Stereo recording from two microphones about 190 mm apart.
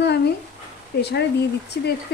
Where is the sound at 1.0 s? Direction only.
60° left (ahead or behind).